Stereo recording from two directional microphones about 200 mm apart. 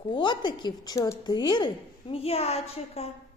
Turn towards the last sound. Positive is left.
turn(degrees=30)  # may be behind; listen again after turning